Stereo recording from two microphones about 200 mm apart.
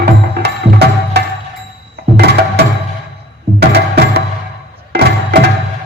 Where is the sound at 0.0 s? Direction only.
55° right (ahead or behind).